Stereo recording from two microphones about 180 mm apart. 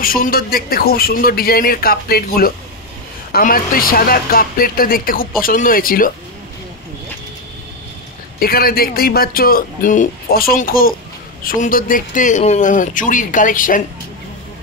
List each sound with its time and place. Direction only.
0.0 s a man's voice: 55° left (ahead or behind)
8.4 s a man's voice: 55° left (ahead or behind)